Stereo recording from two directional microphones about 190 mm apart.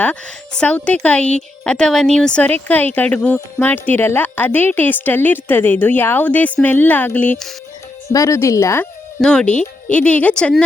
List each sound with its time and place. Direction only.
0.0 s speech: 5° left (ahead or behind)